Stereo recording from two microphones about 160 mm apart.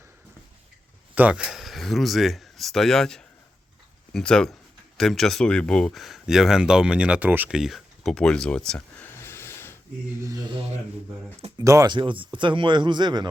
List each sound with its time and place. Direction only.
1.1 s speech: 10° right (ahead or behind); by 9.7 s 15° left (ahead or behind)
10.2 s speech: 20° right (ahead or behind)